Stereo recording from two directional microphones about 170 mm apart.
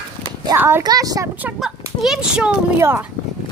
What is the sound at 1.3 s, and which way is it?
Speech, 5° right (ahead or behind).